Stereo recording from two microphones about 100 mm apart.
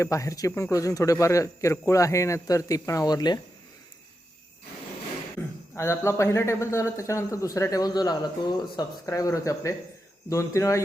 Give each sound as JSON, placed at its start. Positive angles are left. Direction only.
{"t": 0.0, "sound": "speech", "side_deg": 35}
{"t": 5.7, "sound": "a man's voice", "side_deg": 25}
{"t": 9.0, "sound": "a man's voice", "side_deg": 35}